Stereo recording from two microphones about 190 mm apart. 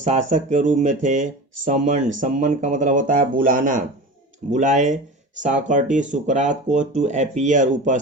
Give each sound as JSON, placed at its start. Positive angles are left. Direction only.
{"t": 0.0, "sound": "speech", "side_deg": -40}